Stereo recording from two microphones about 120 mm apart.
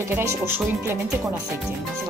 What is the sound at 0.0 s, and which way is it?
Speech, 20° right (ahead or behind).